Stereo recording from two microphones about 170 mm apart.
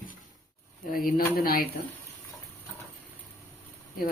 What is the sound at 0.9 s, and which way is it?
Speech, 60° left (ahead or behind).